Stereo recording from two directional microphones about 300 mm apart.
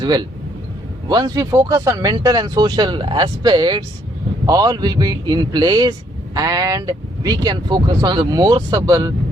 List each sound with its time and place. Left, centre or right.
0.0 s speech: centre